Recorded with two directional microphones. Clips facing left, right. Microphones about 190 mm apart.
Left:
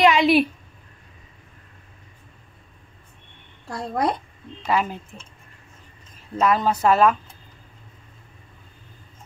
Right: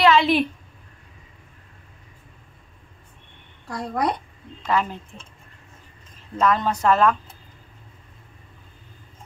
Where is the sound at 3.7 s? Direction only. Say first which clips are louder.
Left 1 dB; 25° left (ahead or behind).